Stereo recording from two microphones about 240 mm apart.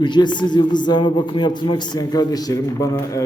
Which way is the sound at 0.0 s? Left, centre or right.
Centre.